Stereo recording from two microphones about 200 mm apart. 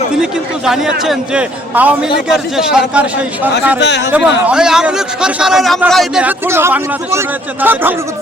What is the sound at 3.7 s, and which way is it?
Speech, 60° left (ahead or behind).